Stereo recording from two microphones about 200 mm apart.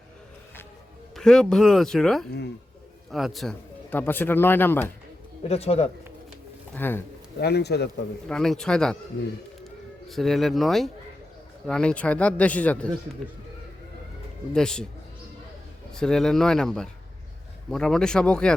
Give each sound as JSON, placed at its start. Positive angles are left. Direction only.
{"t": 1.1, "sound": "speech", "side_deg": 5}
{"t": 5.4, "sound": "speech", "side_deg": 30}
{"t": 6.7, "sound": "speech", "side_deg": 10}
{"t": 7.3, "sound": "speech", "side_deg": 55}
{"t": 8.3, "sound": "speech", "side_deg": 5}
{"t": 10.1, "sound": "speech", "side_deg": 0}
{"t": 14.5, "sound": "speech", "side_deg": 5}
{"t": 15.9, "sound": "speech", "side_deg": 5}